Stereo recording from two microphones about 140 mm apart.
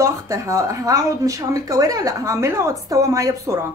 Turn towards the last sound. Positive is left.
turn(degrees=-20)  # may be behind; listen again after turning